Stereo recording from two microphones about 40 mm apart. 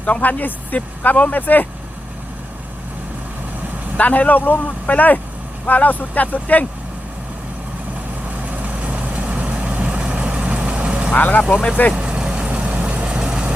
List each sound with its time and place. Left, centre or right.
0.0 s speech: left
0.3 s speech: left
3.9 s speech: left
8.4 s vehicle: right
11.1 s speech: left
11.9 s vehicle: right
12.5 s vehicle: right
13.1 s vehicle: right